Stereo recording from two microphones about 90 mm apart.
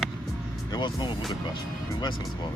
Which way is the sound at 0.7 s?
55° left (ahead or behind).